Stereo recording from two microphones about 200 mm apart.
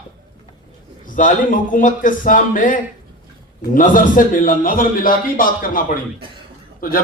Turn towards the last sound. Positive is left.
turn(degrees=45)  # may be behind; listen again after turning